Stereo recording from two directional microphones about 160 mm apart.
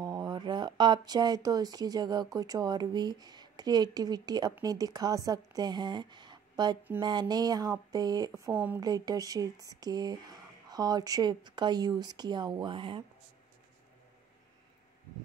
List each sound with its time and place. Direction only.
0.0 s speech: 25° right (ahead or behind)
8.5 s speech: 10° right (ahead or behind)
8.8 s speech: 25° right (ahead or behind)